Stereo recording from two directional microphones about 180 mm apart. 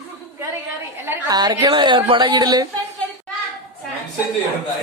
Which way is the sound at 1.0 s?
15° right (ahead or behind).